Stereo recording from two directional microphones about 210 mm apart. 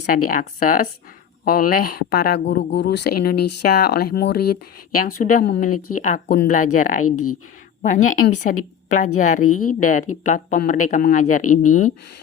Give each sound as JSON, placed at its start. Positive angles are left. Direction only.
{"t": 0.1, "sound": "speech", "side_deg": 40}
{"t": 7.0, "sound": "speech", "side_deg": 90}
{"t": 7.8, "sound": "speech", "side_deg": 40}
{"t": 9.5, "sound": "speech", "side_deg": 90}
{"t": 9.8, "sound": "speech", "side_deg": 35}